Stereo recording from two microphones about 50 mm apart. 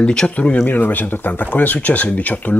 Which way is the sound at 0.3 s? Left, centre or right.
Left.